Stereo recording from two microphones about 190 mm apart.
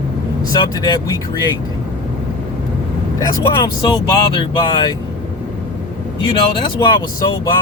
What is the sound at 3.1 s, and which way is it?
Speech, 20° left (ahead or behind).